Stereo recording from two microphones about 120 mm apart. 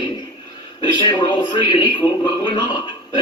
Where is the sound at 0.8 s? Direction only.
40° left (ahead or behind).